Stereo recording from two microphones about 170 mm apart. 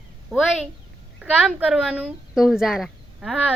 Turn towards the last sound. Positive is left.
turn(degrees=-5)  # may be behind; listen again after turning